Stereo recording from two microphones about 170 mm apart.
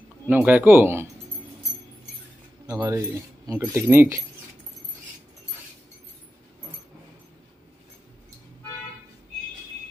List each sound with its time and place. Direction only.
0.3 s speech: 10° right (ahead or behind)
2.6 s speech: 20° right (ahead or behind)